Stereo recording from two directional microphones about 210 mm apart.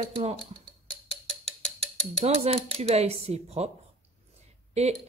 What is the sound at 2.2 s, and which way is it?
Speech, 30° right (ahead or behind).